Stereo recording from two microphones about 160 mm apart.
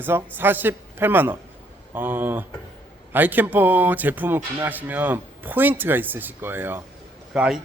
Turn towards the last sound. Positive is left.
turn(degrees=-5)  # may be behind; listen again after turning